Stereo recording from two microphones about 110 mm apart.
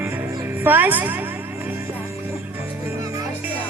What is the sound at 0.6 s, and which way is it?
Speech, 15° right (ahead or behind).